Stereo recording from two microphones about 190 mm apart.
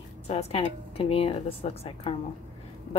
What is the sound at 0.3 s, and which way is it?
A woman's voice, 35° left (ahead or behind).